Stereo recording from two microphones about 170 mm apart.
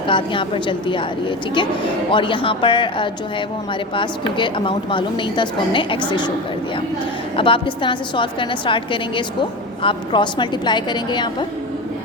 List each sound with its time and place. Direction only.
0.1 s a woman's voice: 30° left (ahead or behind)
2.0 s a woman's voice: 30° left (ahead or behind)
7.3 s a woman's voice: 30° left (ahead or behind)